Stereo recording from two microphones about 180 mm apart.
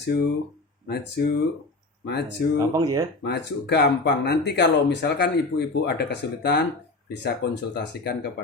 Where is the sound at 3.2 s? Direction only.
65° left (ahead or behind).